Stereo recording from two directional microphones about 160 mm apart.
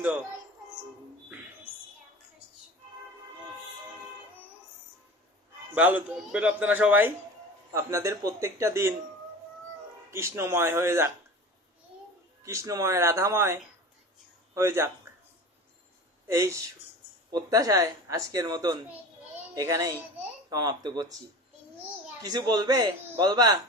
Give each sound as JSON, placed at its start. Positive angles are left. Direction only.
{"t": 5.7, "sound": "speech", "side_deg": -10}
{"t": 10.1, "sound": "speech", "side_deg": -15}
{"t": 12.4, "sound": "speech", "side_deg": -20}
{"t": 16.2, "sound": "speech", "side_deg": -20}
{"t": 22.2, "sound": "speech", "side_deg": -25}